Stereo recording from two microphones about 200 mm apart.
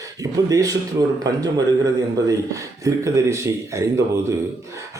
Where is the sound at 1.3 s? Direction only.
15° right (ahead or behind).